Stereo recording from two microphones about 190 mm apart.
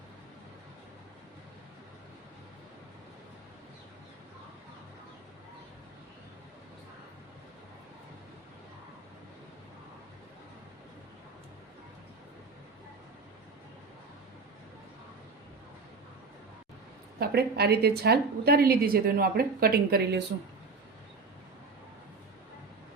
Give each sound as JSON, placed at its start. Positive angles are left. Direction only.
{"t": 17.2, "sound": "a woman's voice", "side_deg": -55}